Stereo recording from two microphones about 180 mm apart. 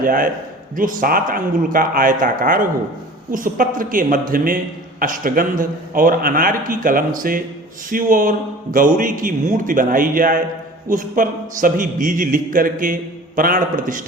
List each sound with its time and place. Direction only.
0.0 s a man's voice: 50° right (ahead or behind)